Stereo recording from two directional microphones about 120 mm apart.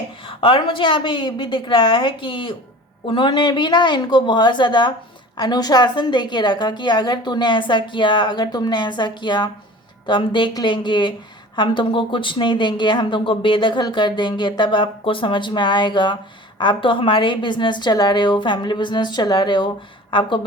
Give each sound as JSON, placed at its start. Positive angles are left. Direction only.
{"t": 0.3, "sound": "a woman's voice", "side_deg": 45}